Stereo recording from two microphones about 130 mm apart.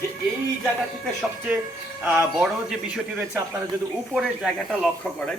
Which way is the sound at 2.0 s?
10° right (ahead or behind).